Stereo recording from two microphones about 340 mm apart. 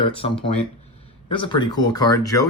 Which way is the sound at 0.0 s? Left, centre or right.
Centre.